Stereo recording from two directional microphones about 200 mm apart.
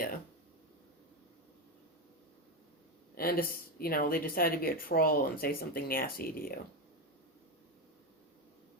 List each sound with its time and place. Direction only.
3.2 s speech: 45° left (ahead or behind)